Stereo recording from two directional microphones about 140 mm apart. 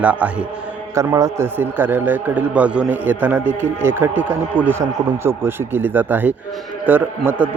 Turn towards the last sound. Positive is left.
turn(degrees=-15)  # may be behind; listen again after turning